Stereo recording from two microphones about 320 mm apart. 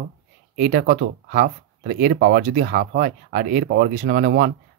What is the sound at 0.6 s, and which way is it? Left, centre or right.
Speech, right.